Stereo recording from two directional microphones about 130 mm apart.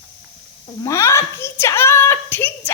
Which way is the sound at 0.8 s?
20° left (ahead or behind).